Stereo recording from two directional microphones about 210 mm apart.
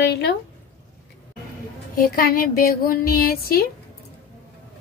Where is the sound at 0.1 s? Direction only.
50° left (ahead or behind).